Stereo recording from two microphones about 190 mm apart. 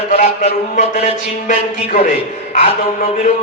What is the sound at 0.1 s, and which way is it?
A man's voice, 35° left (ahead or behind).